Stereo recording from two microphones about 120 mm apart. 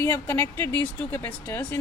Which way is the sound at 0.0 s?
20° left (ahead or behind).